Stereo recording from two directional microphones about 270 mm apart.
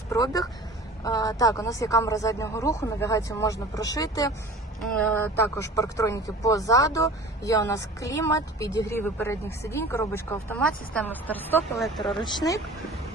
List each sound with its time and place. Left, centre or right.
0.1 s speech: centre
12.2 s speech: centre